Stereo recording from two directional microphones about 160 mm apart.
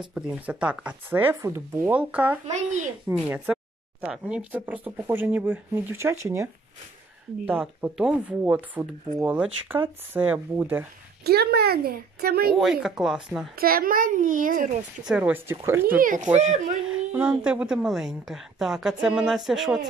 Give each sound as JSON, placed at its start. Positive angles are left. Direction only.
{"t": 0.1, "sound": "speech", "side_deg": -5}
{"t": 2.5, "sound": "speech", "side_deg": -45}
{"t": 3.1, "sound": "speech", "side_deg": -10}
{"t": 11.2, "sound": "speech", "side_deg": -80}
{"t": 12.8, "sound": "a woman's voice", "side_deg": -5}
{"t": 13.6, "sound": "a child's voice", "side_deg": -65}
{"t": 15.0, "sound": "speech", "side_deg": -10}
{"t": 16.0, "sound": "a child's voice", "side_deg": -55}
{"t": 16.8, "sound": "a woman's voice", "side_deg": -10}